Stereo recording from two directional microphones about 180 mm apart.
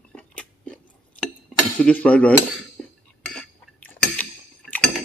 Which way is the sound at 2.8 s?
5° left (ahead or behind).